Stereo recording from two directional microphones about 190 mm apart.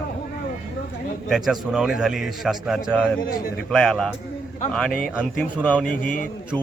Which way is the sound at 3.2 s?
50° left (ahead or behind).